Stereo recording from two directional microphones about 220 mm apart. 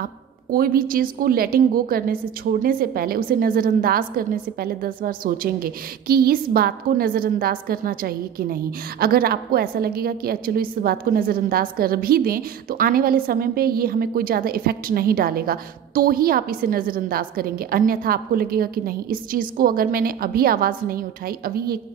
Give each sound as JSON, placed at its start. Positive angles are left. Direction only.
{"t": 0.5, "sound": "a woman's voice", "side_deg": -40}